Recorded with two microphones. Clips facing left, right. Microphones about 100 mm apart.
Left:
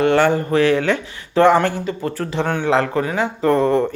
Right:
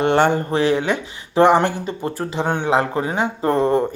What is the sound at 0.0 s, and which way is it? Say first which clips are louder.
Speech: left 1 dB; 25° right (ahead or behind).